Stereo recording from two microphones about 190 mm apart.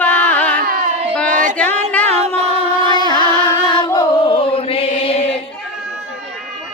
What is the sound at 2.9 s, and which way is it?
Music, 25° left (ahead or behind).